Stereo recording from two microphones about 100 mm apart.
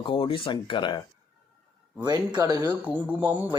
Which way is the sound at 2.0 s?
45° right (ahead or behind).